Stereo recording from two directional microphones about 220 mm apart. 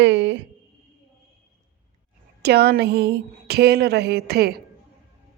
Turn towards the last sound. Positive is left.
turn(degrees=-45)  # may be behind; listen again after turning